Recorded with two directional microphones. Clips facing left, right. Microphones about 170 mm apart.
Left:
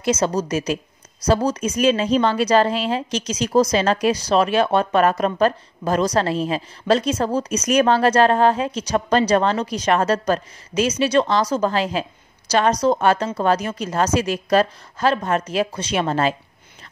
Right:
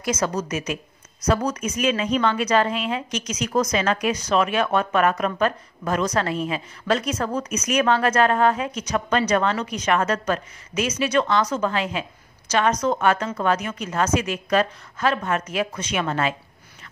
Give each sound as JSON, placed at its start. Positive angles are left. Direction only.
{"t": 0.0, "sound": "a woman's voice", "side_deg": 25}